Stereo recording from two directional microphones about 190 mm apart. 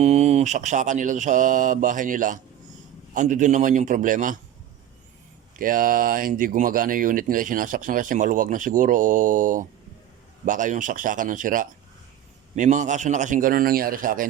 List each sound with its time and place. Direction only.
0.0 s speech: 35° right (ahead or behind)
5.5 s speech: 45° right (ahead or behind)